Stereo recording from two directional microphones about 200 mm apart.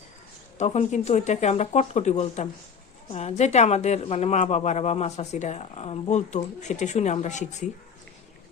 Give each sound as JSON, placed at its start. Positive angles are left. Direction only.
{"t": 0.6, "sound": "a woman's voice", "side_deg": 35}